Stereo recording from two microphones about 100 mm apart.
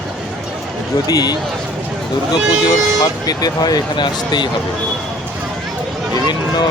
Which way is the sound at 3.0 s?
40° left (ahead or behind).